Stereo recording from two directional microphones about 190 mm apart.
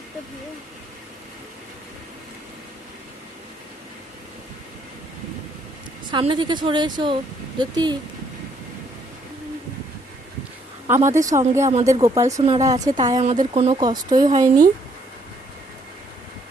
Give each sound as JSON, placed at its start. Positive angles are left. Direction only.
{"t": 6.1, "sound": "a woman's voice", "side_deg": -25}
{"t": 10.8, "sound": "a woman's voice", "side_deg": -15}
{"t": 13.5, "sound": "speech", "side_deg": -35}
{"t": 13.7, "sound": "a woman's voice", "side_deg": -20}